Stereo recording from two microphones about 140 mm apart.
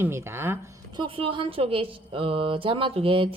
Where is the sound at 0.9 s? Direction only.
35° right (ahead or behind).